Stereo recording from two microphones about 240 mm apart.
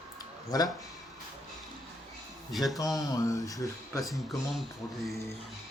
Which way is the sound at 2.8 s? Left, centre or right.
Centre.